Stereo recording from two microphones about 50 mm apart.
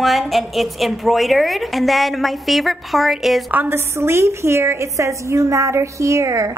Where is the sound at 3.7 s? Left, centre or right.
Right.